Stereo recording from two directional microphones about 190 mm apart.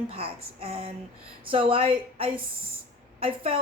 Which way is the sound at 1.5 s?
30° right (ahead or behind).